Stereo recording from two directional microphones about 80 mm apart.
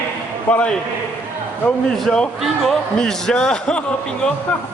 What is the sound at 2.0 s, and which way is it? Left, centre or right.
A man's voice, centre.